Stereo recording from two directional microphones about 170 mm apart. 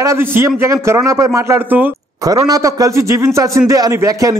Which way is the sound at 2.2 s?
20° right (ahead or behind).